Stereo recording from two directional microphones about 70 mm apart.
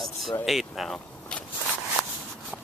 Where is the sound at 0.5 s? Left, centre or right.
Centre.